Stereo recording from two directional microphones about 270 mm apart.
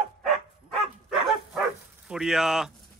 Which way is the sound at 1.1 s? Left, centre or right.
Centre.